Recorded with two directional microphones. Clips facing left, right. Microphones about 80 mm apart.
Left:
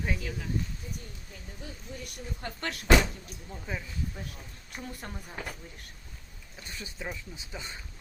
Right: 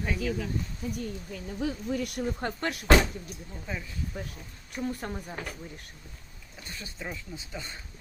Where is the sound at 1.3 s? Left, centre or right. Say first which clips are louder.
Right 13 dB; right.